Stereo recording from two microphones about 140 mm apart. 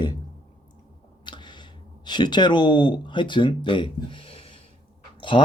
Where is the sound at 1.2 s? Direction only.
35° left (ahead or behind).